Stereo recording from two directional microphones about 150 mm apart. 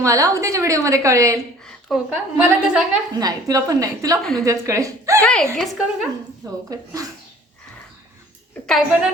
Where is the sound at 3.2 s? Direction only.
20° right (ahead or behind).